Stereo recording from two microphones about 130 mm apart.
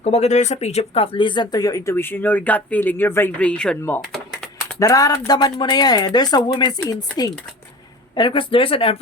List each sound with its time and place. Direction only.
0.0 s speech: 60° left (ahead or behind)